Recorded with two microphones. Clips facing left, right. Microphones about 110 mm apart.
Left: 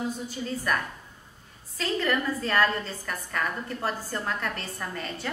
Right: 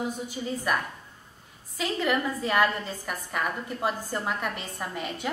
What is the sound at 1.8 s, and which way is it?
A woman's voice, 10° right (ahead or behind).